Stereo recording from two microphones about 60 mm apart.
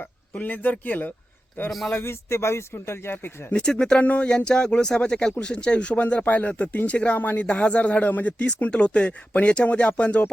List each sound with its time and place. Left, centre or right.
0.3 s speech: left
2.0 s speech: left
3.5 s speech: centre